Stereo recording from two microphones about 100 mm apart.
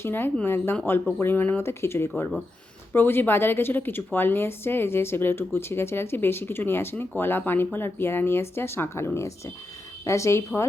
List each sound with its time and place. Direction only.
0.0 s a woman's voice: 20° left (ahead or behind)